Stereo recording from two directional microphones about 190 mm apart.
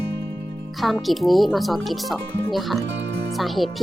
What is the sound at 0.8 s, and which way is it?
Speech, centre (ahead or behind).